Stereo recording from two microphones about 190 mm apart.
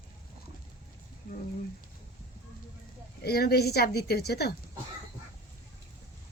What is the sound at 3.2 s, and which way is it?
Speech, 55° left (ahead or behind).